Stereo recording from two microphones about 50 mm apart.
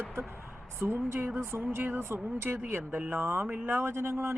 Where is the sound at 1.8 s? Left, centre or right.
Right.